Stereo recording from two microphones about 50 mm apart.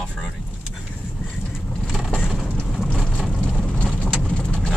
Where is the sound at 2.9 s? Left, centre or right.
Centre.